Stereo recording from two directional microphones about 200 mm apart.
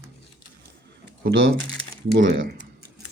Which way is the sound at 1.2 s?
65° right (ahead or behind).